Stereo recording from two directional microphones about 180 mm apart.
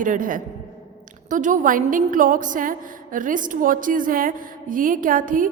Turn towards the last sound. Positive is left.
turn(degrees=-50)  # may be behind; listen again after turning